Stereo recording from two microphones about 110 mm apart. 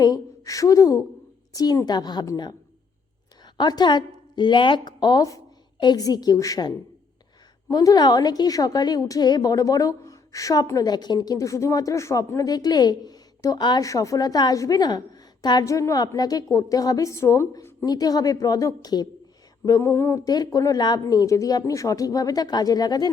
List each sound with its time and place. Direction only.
0.0 s a woman's voice: 30° left (ahead or behind)
17.8 s a woman's voice: 35° left (ahead or behind)